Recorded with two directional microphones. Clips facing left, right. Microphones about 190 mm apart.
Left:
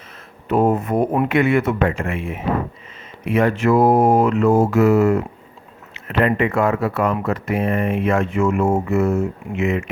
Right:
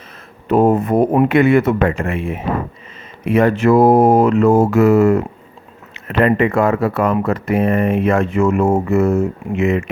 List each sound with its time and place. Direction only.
0.4 s speech: 35° right (ahead or behind)
3.2 s speech: 40° right (ahead or behind)